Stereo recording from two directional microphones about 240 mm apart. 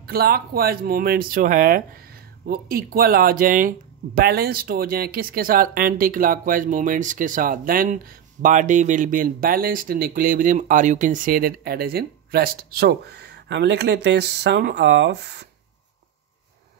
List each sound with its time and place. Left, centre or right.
0.0 s speech: right